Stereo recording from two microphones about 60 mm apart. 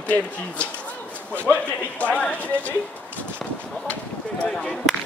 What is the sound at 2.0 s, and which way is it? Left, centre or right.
Speech, left.